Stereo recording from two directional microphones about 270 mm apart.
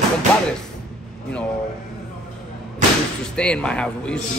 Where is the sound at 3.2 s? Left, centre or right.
Centre.